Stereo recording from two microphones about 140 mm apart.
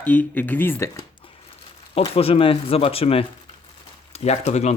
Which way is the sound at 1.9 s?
45° left (ahead or behind).